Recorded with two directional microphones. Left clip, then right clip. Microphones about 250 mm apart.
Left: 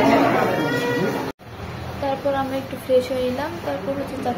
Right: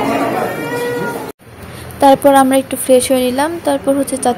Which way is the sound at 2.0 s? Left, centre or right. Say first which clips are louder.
Right 15 dB; right.